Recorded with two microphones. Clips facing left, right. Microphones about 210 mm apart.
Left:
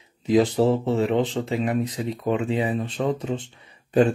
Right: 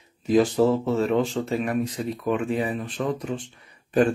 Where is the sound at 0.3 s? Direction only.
20° left (ahead or behind).